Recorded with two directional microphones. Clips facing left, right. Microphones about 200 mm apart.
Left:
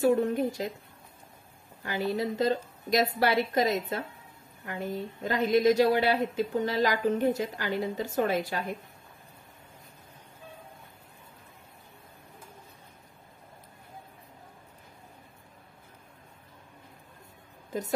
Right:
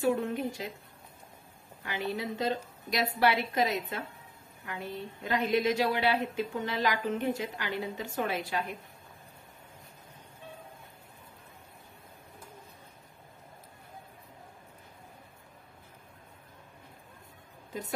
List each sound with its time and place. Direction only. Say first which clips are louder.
0.2 s a woman's voice: left 5 dB; 40° left (ahead or behind)
1.9 s a woman's voice: left 5 dB; 40° left (ahead or behind)